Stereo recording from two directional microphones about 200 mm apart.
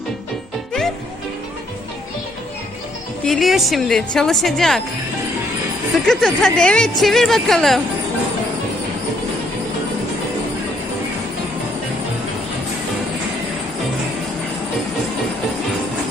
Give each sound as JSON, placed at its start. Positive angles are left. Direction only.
{"t": 3.2, "sound": "a woman's voice", "side_deg": 0}
{"t": 6.1, "sound": "a woman's voice", "side_deg": 0}